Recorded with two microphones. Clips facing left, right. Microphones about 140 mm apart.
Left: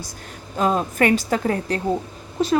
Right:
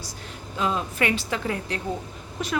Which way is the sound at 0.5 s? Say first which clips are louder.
Left 6 dB; 45° left (ahead or behind).